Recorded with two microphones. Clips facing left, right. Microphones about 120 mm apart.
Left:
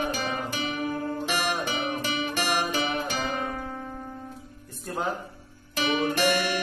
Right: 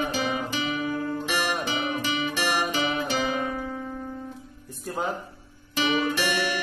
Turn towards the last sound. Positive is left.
turn(degrees=50)  # may be behind; listen again after turning